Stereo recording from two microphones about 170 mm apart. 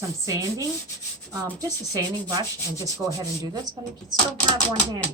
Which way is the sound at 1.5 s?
20° right (ahead or behind).